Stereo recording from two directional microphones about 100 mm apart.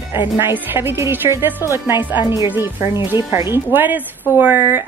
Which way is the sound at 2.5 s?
20° right (ahead or behind).